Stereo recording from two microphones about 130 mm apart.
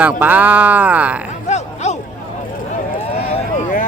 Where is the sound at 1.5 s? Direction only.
60° left (ahead or behind).